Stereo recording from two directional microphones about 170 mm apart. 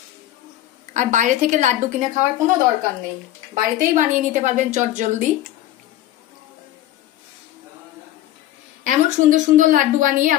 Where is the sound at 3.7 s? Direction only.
45° right (ahead or behind).